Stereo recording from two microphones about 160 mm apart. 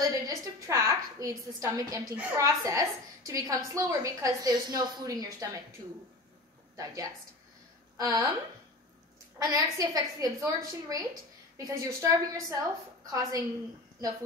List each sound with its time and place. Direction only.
0.0 s a sound: 20° right (ahead or behind)
2.1 s a woman's voice: 20° right (ahead or behind)
8.0 s a woman's voice: 20° right (ahead or behind)
9.4 s a woman's voice: 20° right (ahead or behind)